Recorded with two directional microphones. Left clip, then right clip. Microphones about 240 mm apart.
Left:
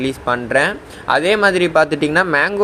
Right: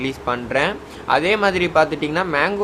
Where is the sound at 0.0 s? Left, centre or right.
Centre.